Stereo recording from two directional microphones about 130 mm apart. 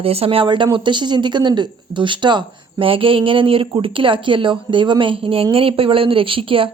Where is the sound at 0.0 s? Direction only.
50° right (ahead or behind).